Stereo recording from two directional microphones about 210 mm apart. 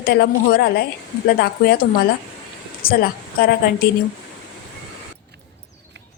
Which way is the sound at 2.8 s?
45° left (ahead or behind).